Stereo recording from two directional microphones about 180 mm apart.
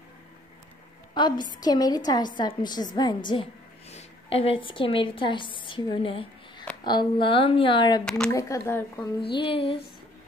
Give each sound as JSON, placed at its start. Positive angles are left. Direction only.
{"t": 1.1, "sound": "a woman's voice", "side_deg": 25}
{"t": 8.0, "sound": "speech", "side_deg": 5}
{"t": 8.3, "sound": "a woman's voice", "side_deg": 15}
{"t": 9.4, "sound": "a woman's voice", "side_deg": 30}